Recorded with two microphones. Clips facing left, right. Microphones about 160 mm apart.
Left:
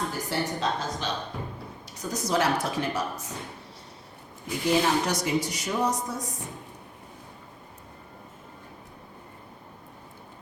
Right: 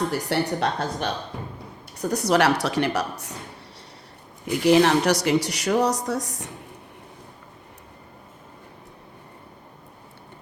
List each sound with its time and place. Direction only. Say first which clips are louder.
0.1 s speech: right 5 dB; 70° right (ahead or behind)
4.4 s speech: right 7 dB; 70° right (ahead or behind)